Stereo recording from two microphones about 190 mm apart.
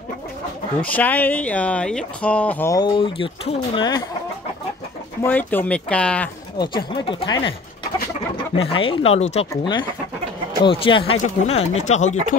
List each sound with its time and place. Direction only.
0.8 s speech: 10° left (ahead or behind); by 4.0 s 25° left (ahead or behind)
5.2 s speech: 10° left (ahead or behind)
6.6 s speech: 25° left (ahead or behind)
8.5 s speech: 30° left (ahead or behind)